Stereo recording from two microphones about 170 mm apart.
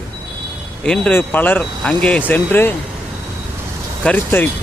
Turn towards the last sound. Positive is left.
turn(degrees=10)  # may be behind; listen again after turning